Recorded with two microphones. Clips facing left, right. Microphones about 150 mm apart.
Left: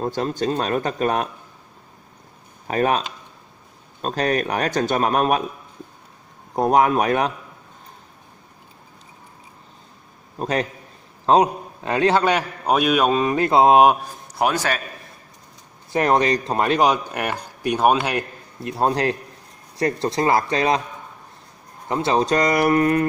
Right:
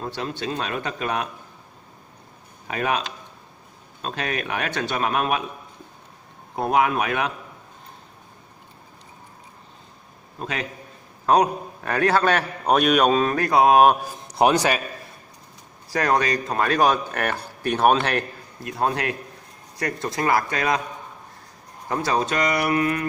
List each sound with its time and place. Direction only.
0.0 s speech: 40° left (ahead or behind)
2.7 s speech: 40° left (ahead or behind)
4.0 s speech: 40° left (ahead or behind)
6.5 s speech: 40° left (ahead or behind)
10.4 s speech: 40° left (ahead or behind)
11.2 s a man's voice: 20° left (ahead or behind)
12.6 s mantra: 5° left (ahead or behind)
13.4 s a man's voice: 25° left (ahead or behind)
14.2 s a man's voice: 20° right (ahead or behind)
15.9 s speech: 25° left (ahead or behind)
18.6 s a man's voice: 25° left (ahead or behind)
21.8 s a man's voice: 25° left (ahead or behind)
22.2 s speech: 40° left (ahead or behind)